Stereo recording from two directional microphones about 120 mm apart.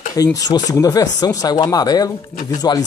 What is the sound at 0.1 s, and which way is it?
Speech, 30° left (ahead or behind).